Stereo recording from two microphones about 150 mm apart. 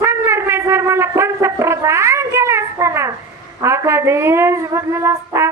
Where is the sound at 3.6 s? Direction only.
20° right (ahead or behind).